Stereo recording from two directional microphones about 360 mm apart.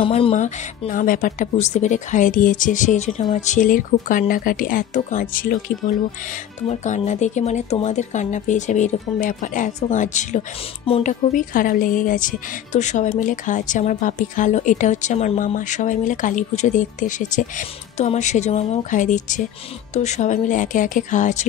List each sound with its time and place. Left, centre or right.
0.0 s speech: centre